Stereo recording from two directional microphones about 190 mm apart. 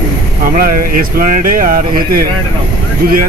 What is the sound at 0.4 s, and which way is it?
Speech, 50° right (ahead or behind).